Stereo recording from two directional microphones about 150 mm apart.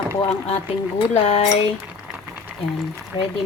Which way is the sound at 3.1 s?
40° left (ahead or behind).